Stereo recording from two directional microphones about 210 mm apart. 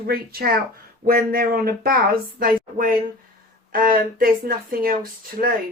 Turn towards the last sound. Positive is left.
turn(degrees=-45)  # may be behind; listen again after turning